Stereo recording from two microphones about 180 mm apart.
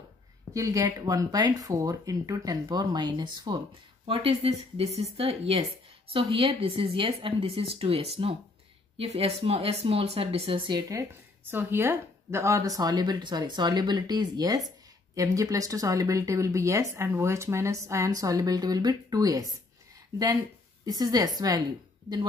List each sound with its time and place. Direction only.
0.5 s a woman's voice: 15° right (ahead or behind)
10.9 s a woman's voice: 15° right (ahead or behind)
20.8 s a woman's voice: 20° right (ahead or behind)